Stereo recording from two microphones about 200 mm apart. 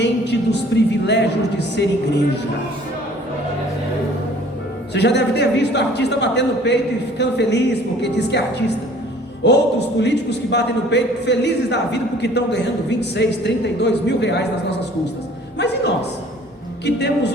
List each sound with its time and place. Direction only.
0.0 s a man's voice: 60° left (ahead or behind)
4.9 s a man's voice: 60° left (ahead or behind)
15.5 s a man's voice: 60° left (ahead or behind)